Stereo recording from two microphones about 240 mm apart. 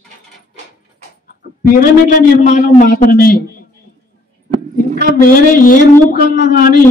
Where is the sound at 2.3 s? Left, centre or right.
Left.